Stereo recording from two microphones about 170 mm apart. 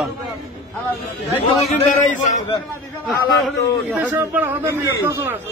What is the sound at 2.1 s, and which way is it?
Speech, 45° left (ahead or behind).